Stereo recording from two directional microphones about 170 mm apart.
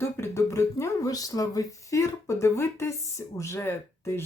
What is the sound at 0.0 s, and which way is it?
Speech, 15° left (ahead or behind).